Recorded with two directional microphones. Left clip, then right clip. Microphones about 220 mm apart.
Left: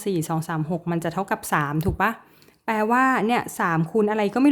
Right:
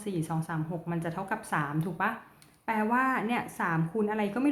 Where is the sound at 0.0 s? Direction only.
50° left (ahead or behind).